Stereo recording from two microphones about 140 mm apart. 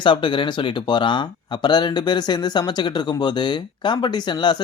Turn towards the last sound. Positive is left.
turn(degrees=30)  # may be behind; listen again after turning